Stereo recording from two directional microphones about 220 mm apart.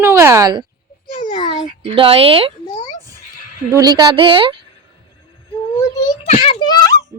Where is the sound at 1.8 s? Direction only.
25° right (ahead or behind).